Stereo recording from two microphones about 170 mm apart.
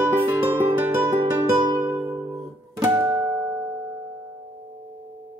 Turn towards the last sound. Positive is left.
turn(degrees=-10)  # may be behind; listen again after turning